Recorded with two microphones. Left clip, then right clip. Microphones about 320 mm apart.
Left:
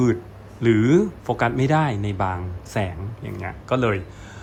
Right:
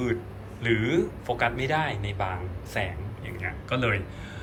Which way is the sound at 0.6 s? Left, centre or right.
Left.